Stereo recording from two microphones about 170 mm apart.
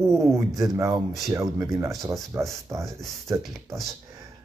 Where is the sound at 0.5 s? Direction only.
20° right (ahead or behind).